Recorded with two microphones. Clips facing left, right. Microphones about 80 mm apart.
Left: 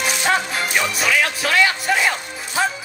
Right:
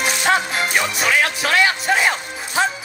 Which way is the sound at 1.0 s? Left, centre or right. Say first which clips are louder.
Right 2 dB; right.